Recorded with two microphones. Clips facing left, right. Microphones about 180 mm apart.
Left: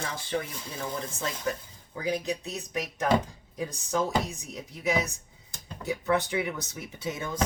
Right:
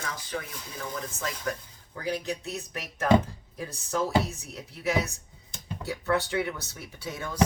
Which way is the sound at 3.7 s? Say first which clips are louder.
Right 1 dB; 15° left (ahead or behind).